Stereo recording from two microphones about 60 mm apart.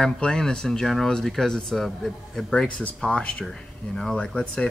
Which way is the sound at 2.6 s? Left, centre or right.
Centre.